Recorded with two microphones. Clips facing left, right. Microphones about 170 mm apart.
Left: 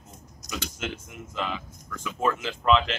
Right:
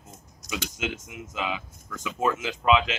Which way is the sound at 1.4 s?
5° right (ahead or behind).